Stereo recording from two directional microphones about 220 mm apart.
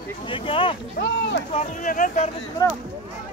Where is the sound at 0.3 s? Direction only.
25° left (ahead or behind).